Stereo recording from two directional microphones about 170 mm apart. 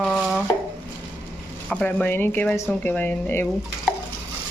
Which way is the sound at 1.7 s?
5° left (ahead or behind).